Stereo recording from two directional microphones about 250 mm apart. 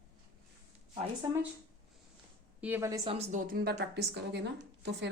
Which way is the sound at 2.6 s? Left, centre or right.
Centre.